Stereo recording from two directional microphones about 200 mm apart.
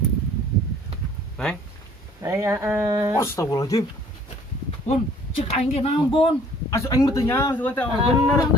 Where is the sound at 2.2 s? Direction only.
15° right (ahead or behind).